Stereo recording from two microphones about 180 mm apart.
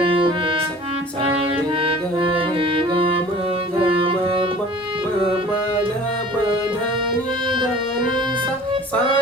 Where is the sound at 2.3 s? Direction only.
30° right (ahead or behind).